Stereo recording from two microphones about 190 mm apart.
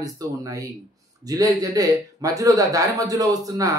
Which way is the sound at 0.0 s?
20° right (ahead or behind).